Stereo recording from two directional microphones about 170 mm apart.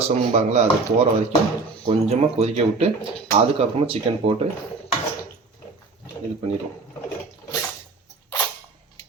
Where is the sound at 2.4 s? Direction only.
35° right (ahead or behind).